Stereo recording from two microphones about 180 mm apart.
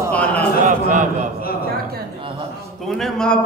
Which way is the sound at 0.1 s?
5° left (ahead or behind).